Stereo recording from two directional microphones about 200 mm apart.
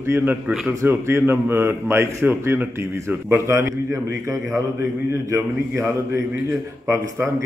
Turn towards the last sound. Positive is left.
turn(degrees=-15)  # may be behind; listen again after turning